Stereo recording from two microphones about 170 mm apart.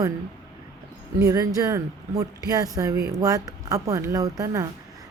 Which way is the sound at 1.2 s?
20° right (ahead or behind).